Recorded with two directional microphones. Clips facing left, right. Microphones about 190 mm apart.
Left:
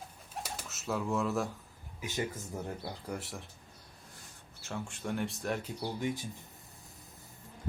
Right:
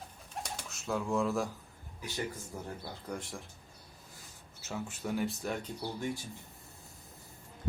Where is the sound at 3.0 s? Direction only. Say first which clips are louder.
Right 1 dB; 5° left (ahead or behind).